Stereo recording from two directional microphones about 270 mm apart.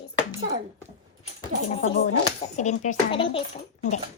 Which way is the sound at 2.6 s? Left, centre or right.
Left.